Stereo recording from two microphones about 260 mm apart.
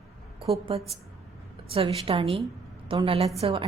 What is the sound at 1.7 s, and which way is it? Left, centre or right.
A woman's voice, right.